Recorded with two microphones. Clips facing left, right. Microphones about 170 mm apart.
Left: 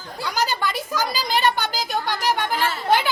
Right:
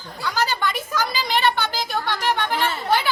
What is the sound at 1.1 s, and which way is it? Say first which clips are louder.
Speech: even; 40° left (ahead or behind).